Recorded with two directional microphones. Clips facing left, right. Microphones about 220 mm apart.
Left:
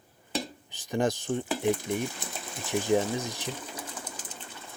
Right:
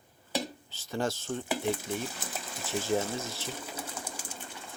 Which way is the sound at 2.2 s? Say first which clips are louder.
Right 1 dB; 5° right (ahead or behind).